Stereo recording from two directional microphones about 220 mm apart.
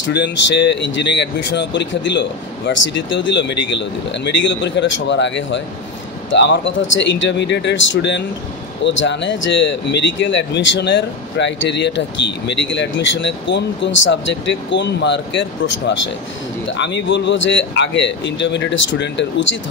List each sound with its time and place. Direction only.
0.1 s speech: 55° left (ahead or behind)